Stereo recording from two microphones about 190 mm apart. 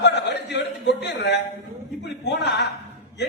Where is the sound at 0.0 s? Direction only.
65° left (ahead or behind).